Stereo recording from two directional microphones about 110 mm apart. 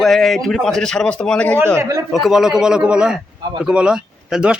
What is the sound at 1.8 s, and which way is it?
Speech, 25° right (ahead or behind).